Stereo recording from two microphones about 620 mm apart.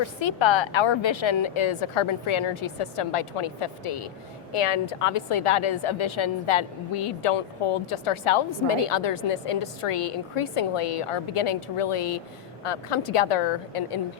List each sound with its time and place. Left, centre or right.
0.2 s a woman's voice: left